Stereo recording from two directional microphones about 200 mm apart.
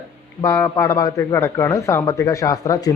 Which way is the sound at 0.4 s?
15° left (ahead or behind).